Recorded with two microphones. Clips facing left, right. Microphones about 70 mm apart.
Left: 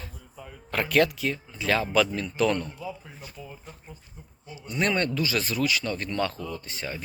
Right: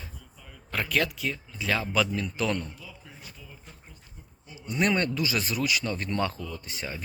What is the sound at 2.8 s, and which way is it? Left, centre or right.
Speech, left.